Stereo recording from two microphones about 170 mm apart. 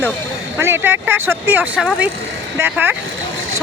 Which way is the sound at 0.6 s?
15° right (ahead or behind).